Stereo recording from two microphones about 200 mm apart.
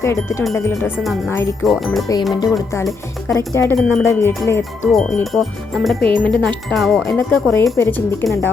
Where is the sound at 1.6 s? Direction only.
Centre (ahead or behind).